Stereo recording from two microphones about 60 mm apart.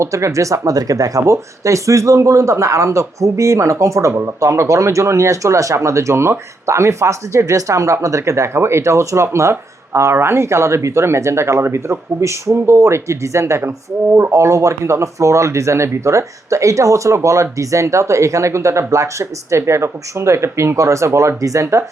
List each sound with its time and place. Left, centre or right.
0.0 s speech: right